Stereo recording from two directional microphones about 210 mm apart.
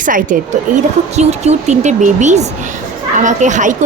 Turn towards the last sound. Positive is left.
turn(degrees=-35)  # may be behind; listen again after turning